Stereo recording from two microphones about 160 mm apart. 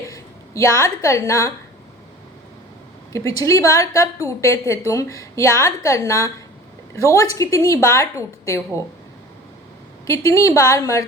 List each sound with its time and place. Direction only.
0.1 s a woman's voice: 20° left (ahead or behind)
3.1 s a woman's voice: 20° left (ahead or behind)
10.1 s a woman's voice: 20° left (ahead or behind)